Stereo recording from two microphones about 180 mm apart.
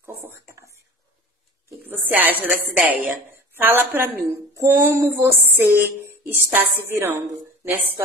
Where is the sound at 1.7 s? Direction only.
10° right (ahead or behind).